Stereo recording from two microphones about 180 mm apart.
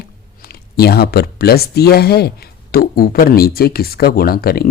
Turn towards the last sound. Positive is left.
turn(degrees=55)  # may be behind; listen again after turning